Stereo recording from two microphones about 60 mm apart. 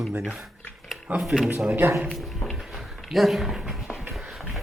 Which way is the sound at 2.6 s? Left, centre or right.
Centre.